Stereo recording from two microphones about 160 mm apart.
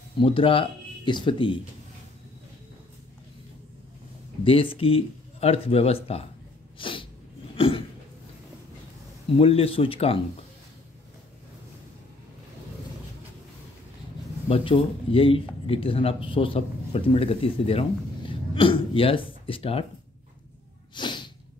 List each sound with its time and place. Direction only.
0.2 s speech: 35° left (ahead or behind)
4.5 s speech: 35° left (ahead or behind)
6.8 s sneeze: 30° left (ahead or behind)
7.5 s a sound: 35° left (ahead or behind)
9.4 s speech: 35° left (ahead or behind)
14.5 s speech: 35° left (ahead or behind)
20.9 s sneeze: 30° left (ahead or behind)